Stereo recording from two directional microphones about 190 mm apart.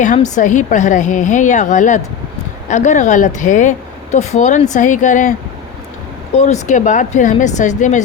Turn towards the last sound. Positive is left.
turn(degrees=40)  # may be behind; listen again after turning